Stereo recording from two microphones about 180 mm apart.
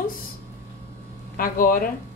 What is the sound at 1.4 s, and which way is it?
Speech, 50° left (ahead or behind).